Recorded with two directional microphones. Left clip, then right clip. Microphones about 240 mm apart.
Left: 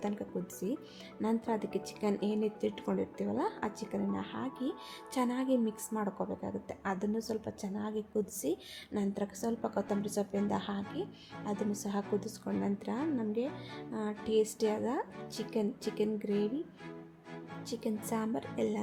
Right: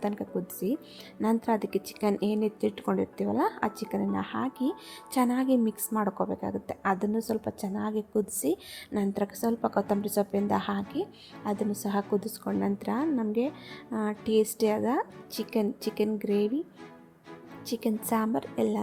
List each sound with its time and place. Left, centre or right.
0.0 s a woman's voice: centre
17.7 s a woman's voice: centre